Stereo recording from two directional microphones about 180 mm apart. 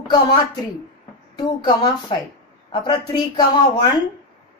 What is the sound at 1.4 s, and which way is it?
A woman's voice, 25° left (ahead or behind).